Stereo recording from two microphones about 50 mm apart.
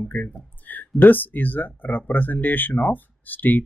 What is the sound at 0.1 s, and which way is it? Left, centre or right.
Speech, left.